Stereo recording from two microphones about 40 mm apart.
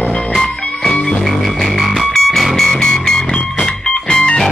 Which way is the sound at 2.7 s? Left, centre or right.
Centre.